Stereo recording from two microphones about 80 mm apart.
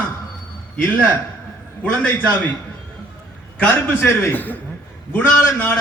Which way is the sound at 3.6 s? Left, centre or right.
Left.